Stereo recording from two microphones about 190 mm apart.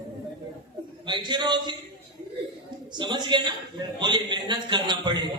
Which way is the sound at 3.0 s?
25° right (ahead or behind).